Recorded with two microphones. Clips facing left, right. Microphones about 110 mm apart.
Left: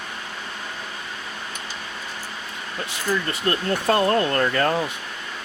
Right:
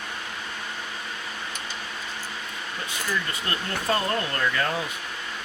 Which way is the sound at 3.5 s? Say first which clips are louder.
Left 8 dB; 40° left (ahead or behind).